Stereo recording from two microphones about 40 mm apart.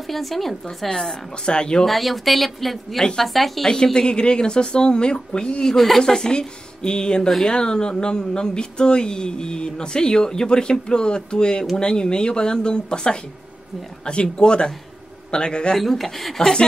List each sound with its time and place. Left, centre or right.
0.0 s speech: centre
0.8 s speech: centre
1.9 s speech: centre
3.0 s speech: centre
3.3 s speech: centre
3.6 s speech: centre
5.8 s speech: centre; by 15.7 s left
15.7 s speech: centre